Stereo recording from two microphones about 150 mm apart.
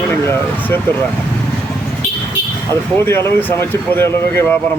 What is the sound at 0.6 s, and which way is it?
Speech, 10° left (ahead or behind).